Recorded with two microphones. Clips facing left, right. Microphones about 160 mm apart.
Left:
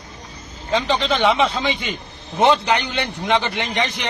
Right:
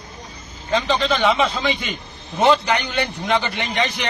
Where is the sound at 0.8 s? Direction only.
15° left (ahead or behind).